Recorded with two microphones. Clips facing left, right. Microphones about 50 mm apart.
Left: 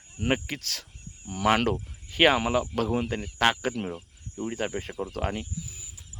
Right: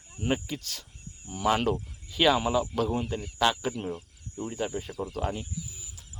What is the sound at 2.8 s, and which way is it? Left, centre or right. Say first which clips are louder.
Speech: left 1 dB; left.